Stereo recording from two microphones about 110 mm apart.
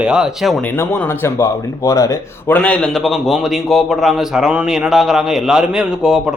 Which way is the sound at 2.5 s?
10° left (ahead or behind).